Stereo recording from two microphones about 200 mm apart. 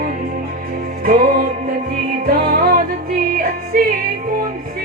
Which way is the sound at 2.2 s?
50° right (ahead or behind).